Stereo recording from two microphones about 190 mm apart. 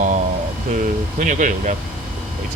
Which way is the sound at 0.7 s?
40° right (ahead or behind).